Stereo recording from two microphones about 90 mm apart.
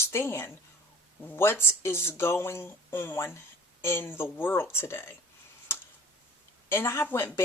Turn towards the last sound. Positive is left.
turn(degrees=25)  # may be behind; listen again after turning